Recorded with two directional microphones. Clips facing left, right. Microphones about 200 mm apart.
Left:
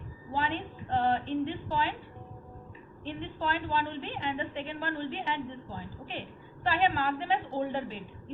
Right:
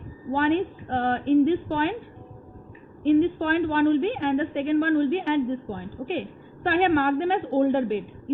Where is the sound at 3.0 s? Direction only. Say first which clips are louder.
Right 15 dB; 55° right (ahead or behind).